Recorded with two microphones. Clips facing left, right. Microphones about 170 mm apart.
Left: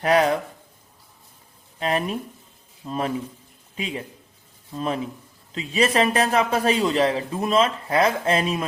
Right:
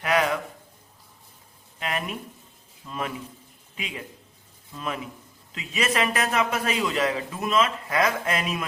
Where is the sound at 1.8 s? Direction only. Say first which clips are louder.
Left 6 dB; 30° left (ahead or behind).